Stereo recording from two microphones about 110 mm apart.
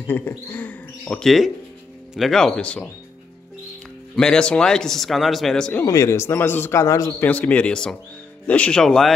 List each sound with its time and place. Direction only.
0.0 s speech: 15° left (ahead or behind)
4.1 s speech: 5° left (ahead or behind)
5.9 s a man's voice: 25° left (ahead or behind)
7.2 s speech: 15° left (ahead or behind)